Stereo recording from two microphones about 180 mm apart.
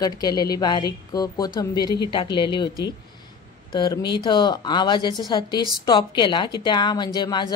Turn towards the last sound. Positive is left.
turn(degrees=25)  # may be behind; listen again after turning